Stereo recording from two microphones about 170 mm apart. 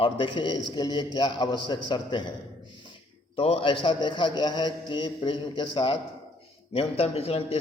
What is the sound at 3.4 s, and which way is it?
A man's voice, 35° left (ahead or behind).